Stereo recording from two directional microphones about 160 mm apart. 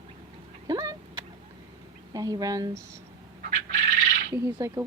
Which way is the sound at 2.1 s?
20° right (ahead or behind).